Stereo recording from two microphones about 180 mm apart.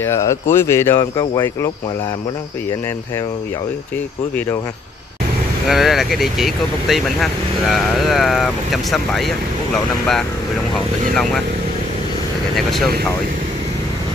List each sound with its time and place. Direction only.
0.0 s speech: 15° left (ahead or behind)
5.7 s speech: centre (ahead or behind)
10.7 s speech: centre (ahead or behind)
12.5 s speech: centre (ahead or behind)